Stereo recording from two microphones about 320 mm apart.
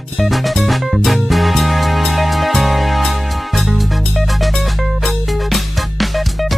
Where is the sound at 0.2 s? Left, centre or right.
Centre.